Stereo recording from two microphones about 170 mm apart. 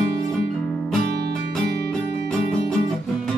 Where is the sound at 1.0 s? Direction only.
70° right (ahead or behind).